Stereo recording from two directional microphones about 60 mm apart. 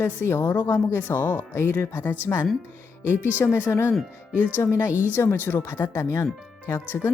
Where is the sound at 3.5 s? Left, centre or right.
Left.